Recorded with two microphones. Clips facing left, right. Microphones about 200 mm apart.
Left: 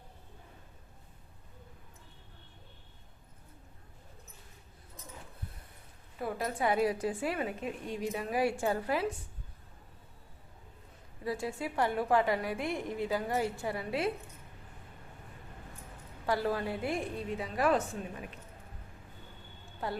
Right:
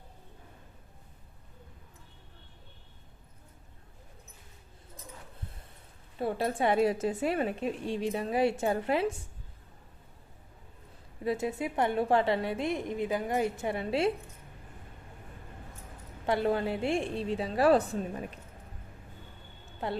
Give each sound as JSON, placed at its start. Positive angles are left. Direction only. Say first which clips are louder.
{"t": 6.1, "sound": "a woman's voice", "louder": "right 4 dB", "side_deg": -30}
{"t": 11.2, "sound": "a woman's voice", "louder": "right 4 dB", "side_deg": -20}
{"t": 16.2, "sound": "a woman's voice", "louder": "right 4 dB", "side_deg": -20}
{"t": 19.8, "sound": "a woman's voice", "louder": "right 3 dB", "side_deg": -25}